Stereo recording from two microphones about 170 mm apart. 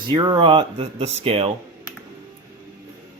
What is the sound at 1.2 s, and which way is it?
Speech, 35° right (ahead or behind).